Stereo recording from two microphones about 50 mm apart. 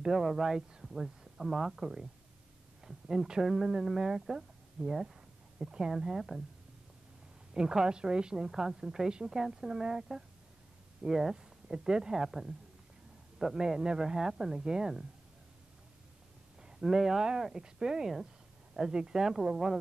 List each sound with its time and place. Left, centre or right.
0.0 s speech: centre
7.5 s speech: centre
16.6 s speech: centre